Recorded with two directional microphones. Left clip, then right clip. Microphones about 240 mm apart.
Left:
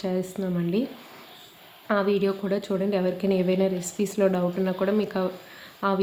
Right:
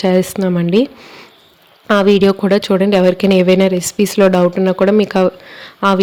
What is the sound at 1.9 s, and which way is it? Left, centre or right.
Speech, right.